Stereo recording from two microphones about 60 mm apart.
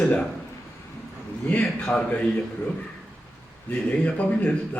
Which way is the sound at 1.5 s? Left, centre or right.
Left.